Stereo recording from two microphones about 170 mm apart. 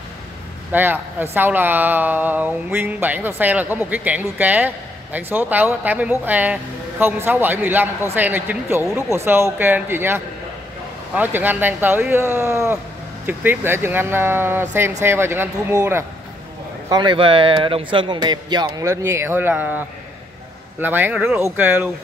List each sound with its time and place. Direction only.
0.7 s speech: 10° right (ahead or behind)
16.9 s speech: 25° right (ahead or behind); by 19.8 s 10° right (ahead or behind)
20.8 s speech: 10° right (ahead or behind)